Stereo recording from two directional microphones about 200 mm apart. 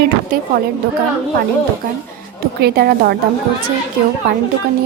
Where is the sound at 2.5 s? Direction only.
50° right (ahead or behind).